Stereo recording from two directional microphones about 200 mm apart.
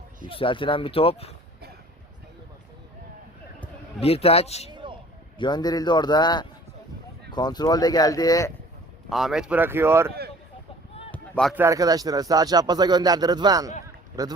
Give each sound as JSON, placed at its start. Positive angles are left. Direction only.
{"t": 0.3, "sound": "speech", "side_deg": 25}
{"t": 4.0, "sound": "speech", "side_deg": 30}
{"t": 4.7, "sound": "a sound", "side_deg": -25}
{"t": 5.4, "sound": "speech", "side_deg": 20}
{"t": 9.0, "sound": "speech", "side_deg": 0}
{"t": 11.1, "sound": "run", "side_deg": 5}
{"t": 11.5, "sound": "speech", "side_deg": -15}
{"t": 13.8, "sound": "a sound", "side_deg": -20}